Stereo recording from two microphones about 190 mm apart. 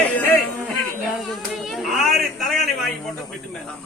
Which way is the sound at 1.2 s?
Centre (ahead or behind).